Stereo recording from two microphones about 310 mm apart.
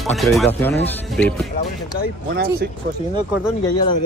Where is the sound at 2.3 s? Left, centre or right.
Right.